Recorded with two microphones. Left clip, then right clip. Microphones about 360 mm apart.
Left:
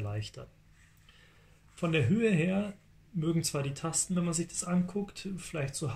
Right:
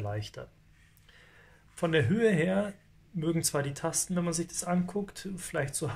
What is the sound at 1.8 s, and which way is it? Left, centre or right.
Speech, centre.